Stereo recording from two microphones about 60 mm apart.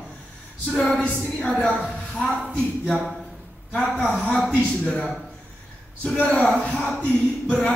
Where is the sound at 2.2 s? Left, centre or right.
Centre.